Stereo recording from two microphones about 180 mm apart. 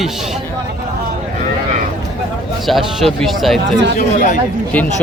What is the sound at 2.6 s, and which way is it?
Speech, centre (ahead or behind).